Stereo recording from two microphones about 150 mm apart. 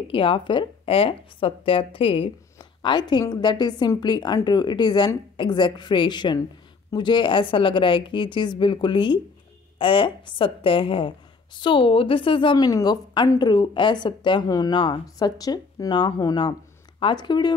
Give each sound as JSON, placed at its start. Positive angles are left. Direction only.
{"t": 0.1, "sound": "a woman's voice", "side_deg": 35}